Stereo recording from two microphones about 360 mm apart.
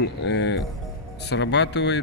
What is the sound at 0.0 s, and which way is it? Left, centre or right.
Speech, left.